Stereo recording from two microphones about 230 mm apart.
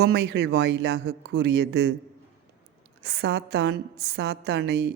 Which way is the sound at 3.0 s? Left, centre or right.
Right.